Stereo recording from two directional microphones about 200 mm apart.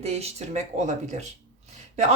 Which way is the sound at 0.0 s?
30° right (ahead or behind).